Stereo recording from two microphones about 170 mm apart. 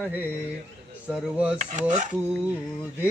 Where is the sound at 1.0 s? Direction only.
5° right (ahead or behind).